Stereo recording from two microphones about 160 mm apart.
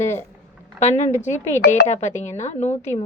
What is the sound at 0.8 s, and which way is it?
A woman's voice, 45° left (ahead or behind).